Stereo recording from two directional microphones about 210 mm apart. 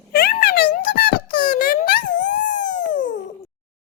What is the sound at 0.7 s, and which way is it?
Wail, 45° left (ahead or behind).